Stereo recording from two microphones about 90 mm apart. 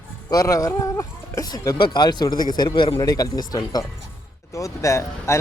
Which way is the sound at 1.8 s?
55° left (ahead or behind).